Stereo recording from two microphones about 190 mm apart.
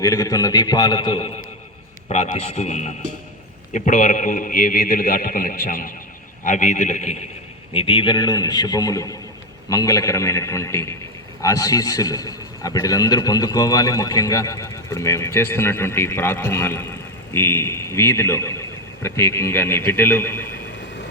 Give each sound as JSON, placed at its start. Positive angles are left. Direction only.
{"t": 0.0, "sound": "a man's voice", "side_deg": 15}